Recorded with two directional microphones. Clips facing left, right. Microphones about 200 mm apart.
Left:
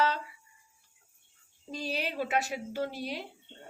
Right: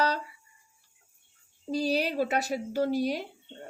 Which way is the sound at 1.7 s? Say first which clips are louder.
Right 7 dB; 40° right (ahead or behind).